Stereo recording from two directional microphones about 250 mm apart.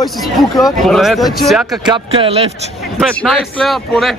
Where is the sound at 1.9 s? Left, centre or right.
Right.